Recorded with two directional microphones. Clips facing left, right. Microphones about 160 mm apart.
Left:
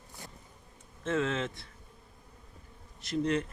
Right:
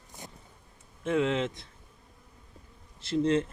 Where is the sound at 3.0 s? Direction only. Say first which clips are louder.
Right 4 dB; 30° right (ahead or behind).